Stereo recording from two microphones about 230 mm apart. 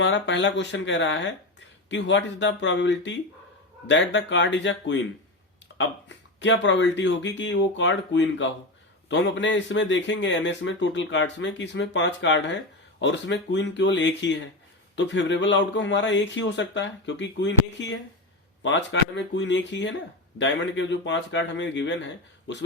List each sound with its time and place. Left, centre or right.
0.0 s speech: left